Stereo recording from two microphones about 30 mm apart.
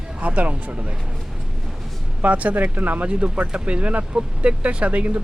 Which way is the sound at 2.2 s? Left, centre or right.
Right.